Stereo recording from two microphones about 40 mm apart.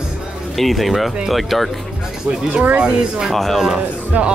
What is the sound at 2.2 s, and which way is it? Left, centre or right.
Speech, right.